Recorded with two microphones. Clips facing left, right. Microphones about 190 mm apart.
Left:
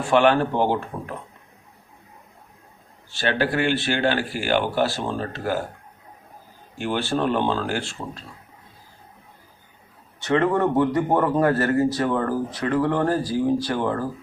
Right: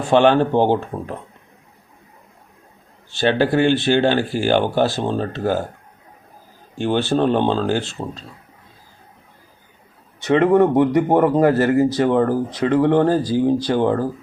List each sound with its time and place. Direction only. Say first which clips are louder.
0.1 s a man's voice: right 4 dB; 25° right (ahead or behind)
3.2 s a man's voice: right 6 dB; 25° right (ahead or behind)
6.7 s a man's voice: right 6 dB; 25° right (ahead or behind)
10.2 s a man's voice: right 6 dB; 20° right (ahead or behind)